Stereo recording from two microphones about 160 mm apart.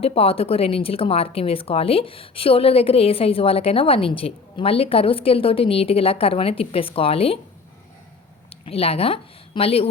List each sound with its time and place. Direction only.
0.0 s speech: 40° left (ahead or behind)
8.4 s a woman's voice: 35° left (ahead or behind)